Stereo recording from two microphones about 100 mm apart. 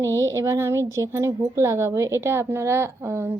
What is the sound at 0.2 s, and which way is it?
A woman's voice, 30° right (ahead or behind).